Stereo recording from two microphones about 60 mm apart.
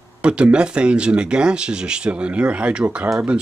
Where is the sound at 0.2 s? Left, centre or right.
Centre.